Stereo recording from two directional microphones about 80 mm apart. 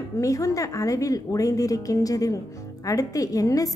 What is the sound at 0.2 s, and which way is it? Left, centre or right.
A woman's voice, left.